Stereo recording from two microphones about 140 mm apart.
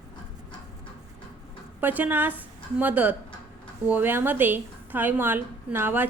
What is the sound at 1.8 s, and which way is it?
A woman's voice, 10° right (ahead or behind).